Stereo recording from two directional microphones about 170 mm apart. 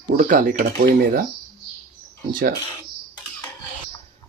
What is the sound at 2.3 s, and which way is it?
Speech, 55° right (ahead or behind).